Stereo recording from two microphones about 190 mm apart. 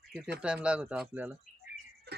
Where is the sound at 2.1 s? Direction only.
55° right (ahead or behind).